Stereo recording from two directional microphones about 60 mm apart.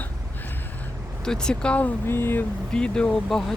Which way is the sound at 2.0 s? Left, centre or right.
Left.